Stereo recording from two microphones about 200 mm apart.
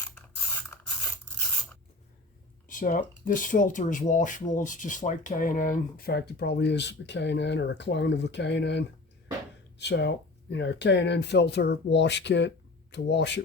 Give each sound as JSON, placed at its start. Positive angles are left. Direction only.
{"t": 0.7, "sound": "scratch", "side_deg": 10}
{"t": 2.6, "sound": "speech", "side_deg": 40}